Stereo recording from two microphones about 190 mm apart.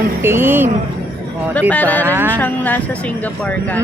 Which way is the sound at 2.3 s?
10° left (ahead or behind).